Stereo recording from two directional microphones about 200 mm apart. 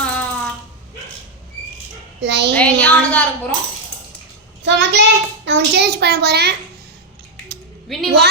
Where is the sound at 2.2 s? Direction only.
60° right (ahead or behind).